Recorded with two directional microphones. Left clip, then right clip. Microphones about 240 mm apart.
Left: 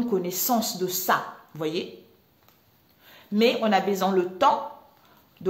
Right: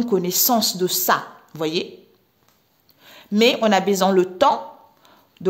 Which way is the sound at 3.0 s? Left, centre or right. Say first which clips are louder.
Right 5 dB; right.